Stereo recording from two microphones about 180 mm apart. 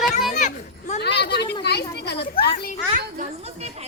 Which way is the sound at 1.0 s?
65° left (ahead or behind).